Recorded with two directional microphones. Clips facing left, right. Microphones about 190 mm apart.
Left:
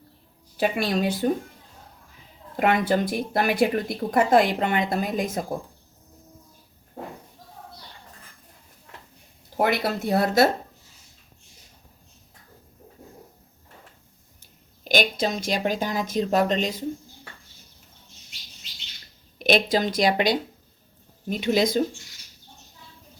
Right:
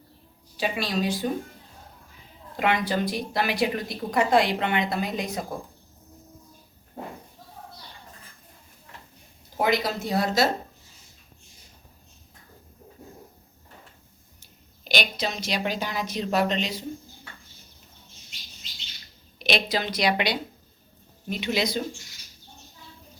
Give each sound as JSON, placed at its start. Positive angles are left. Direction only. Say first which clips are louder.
{"t": 0.5, "sound": "a woman's voice", "louder": "left 4 dB", "side_deg": 50}
{"t": 2.6, "sound": "a woman's voice", "louder": "left 3 dB", "side_deg": 50}
{"t": 9.6, "sound": "speech", "louder": "left 1 dB", "side_deg": 60}
{"t": 14.8, "sound": "a woman's voice", "louder": "left 5 dB", "side_deg": 50}
{"t": 19.4, "sound": "a woman's voice", "louder": "left 5 dB", "side_deg": 50}